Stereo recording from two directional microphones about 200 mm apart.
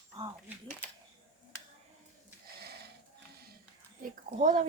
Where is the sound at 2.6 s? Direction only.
55° right (ahead or behind).